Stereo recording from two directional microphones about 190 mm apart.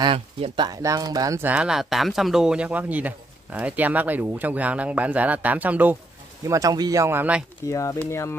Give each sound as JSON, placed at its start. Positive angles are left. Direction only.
{"t": 0.0, "sound": "speech", "side_deg": -25}
{"t": 7.6, "sound": "speech", "side_deg": 15}